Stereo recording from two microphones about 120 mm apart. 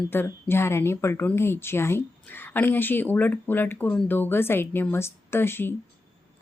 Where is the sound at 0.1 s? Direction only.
20° left (ahead or behind).